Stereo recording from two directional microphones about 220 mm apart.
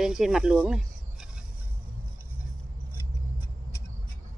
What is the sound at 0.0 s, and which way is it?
Speech, centre (ahead or behind).